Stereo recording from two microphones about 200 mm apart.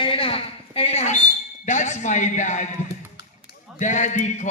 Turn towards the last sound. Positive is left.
turn(degrees=35)  # may be behind; listen again after turning